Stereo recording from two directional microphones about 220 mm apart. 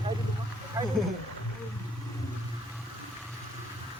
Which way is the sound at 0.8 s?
15° right (ahead or behind).